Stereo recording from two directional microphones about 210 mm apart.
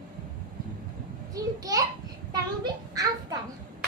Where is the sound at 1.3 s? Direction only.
15° right (ahead or behind).